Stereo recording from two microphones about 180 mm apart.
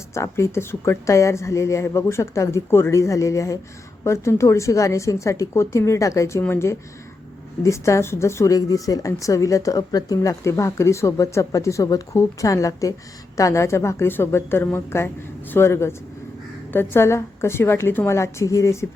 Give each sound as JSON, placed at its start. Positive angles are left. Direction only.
{"t": 0.1, "sound": "speech", "side_deg": 15}